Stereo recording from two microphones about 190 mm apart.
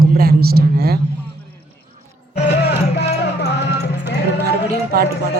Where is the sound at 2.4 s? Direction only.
60° left (ahead or behind).